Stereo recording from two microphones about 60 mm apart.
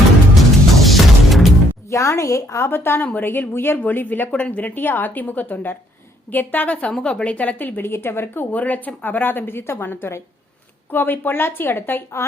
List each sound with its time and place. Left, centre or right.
0.8 s music: centre
1.9 s a woman's voice: left
2.6 s a woman's voice: left
4.3 s a woman's voice: left
6.9 s a woman's voice: centre; by 8.4 s left
8.4 s a woman's voice: left